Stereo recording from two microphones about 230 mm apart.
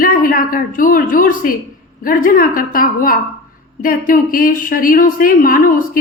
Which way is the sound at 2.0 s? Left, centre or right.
Left.